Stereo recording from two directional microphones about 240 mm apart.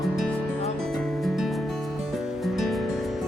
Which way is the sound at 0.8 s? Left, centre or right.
Centre.